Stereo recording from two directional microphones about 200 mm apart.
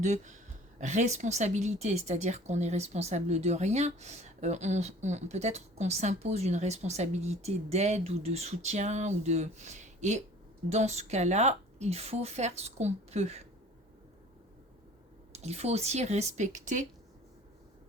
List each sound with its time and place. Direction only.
0.0 s speech: 35° right (ahead or behind)
15.3 s speech: 35° right (ahead or behind)